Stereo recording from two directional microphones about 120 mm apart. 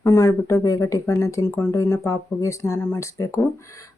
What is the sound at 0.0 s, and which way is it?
Speech, 25° left (ahead or behind).